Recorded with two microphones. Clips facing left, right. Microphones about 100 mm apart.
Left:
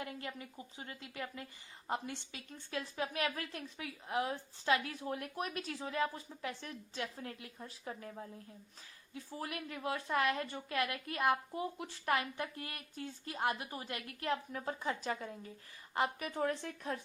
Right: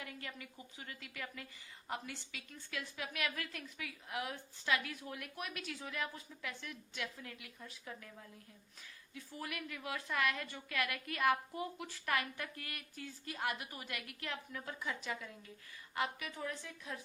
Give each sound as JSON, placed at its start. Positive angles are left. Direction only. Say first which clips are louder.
{"t": 0.0, "sound": "a woman's voice", "louder": "left 5 dB", "side_deg": 25}